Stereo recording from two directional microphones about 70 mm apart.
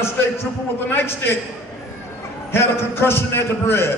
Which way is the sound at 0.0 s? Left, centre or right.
Left.